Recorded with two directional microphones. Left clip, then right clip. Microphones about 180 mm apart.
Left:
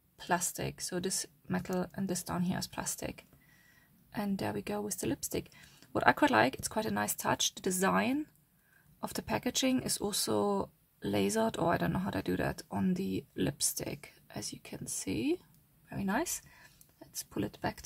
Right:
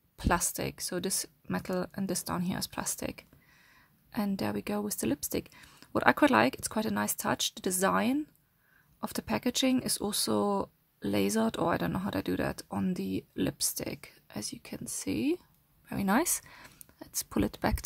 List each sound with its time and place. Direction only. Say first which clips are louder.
0.2 s speech: right 3 dB; 30° right (ahead or behind)
15.9 s speech: right 5 dB; 40° right (ahead or behind)